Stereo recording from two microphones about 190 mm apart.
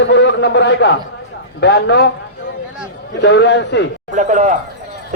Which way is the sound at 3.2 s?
65° left (ahead or behind).